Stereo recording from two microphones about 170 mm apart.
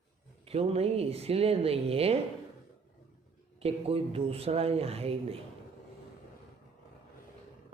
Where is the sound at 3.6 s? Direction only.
35° right (ahead or behind).